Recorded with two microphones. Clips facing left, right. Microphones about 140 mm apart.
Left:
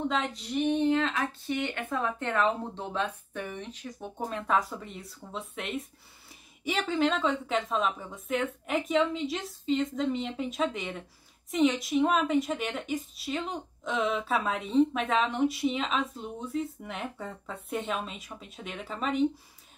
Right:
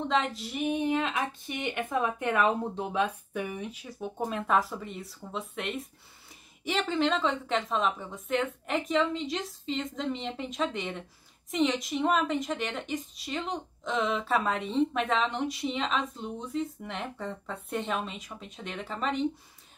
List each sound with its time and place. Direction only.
0.1 s a woman's voice: centre (ahead or behind)